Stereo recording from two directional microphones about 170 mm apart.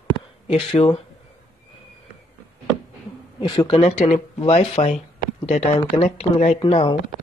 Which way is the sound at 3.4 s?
30° left (ahead or behind).